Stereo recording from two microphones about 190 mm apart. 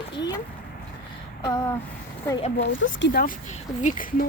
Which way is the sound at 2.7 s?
80° left.